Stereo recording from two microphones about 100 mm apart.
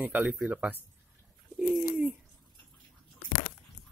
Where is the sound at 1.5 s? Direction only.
10° right (ahead or behind).